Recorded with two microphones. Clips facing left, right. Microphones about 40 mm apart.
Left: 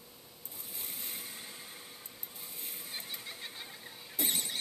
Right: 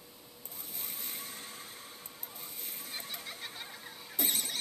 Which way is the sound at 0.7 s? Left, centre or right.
Centre.